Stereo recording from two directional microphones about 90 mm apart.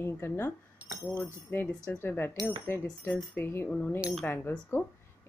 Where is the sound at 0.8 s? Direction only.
15° right (ahead or behind).